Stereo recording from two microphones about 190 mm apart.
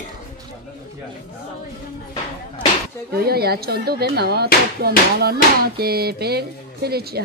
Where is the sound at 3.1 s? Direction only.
55° right (ahead or behind).